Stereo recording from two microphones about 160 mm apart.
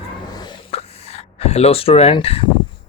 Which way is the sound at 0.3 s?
25° left (ahead or behind).